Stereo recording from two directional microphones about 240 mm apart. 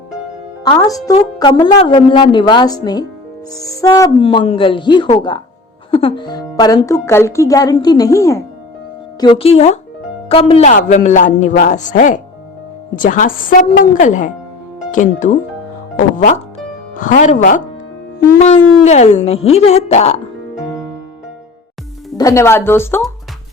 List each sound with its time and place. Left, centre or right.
0.6 s a woman's voice: centre
9.2 s a woman's voice: left
22.2 s speech: centre